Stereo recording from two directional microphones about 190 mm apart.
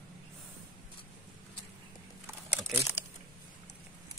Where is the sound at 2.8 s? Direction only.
10° right (ahead or behind).